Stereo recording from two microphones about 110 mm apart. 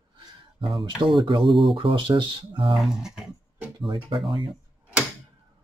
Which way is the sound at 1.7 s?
50° right (ahead or behind).